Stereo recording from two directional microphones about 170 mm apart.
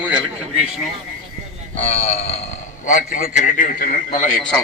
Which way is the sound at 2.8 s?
50° left (ahead or behind).